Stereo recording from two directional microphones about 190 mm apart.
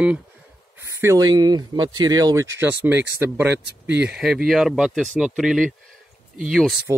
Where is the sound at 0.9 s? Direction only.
15° right (ahead or behind); by 6.7 s centre (ahead or behind).